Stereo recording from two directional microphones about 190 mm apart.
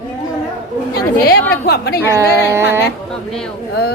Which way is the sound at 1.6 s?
60° left (ahead or behind).